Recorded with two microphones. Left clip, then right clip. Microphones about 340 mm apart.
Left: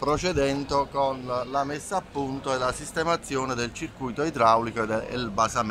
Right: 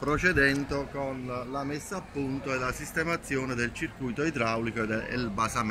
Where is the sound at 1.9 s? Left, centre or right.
Centre.